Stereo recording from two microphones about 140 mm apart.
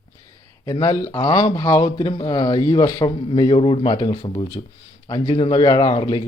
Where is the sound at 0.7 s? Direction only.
25° left (ahead or behind).